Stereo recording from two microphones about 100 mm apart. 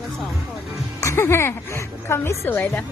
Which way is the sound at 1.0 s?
25° left (ahead or behind).